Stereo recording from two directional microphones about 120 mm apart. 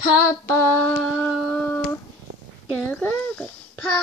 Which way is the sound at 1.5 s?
10° left (ahead or behind).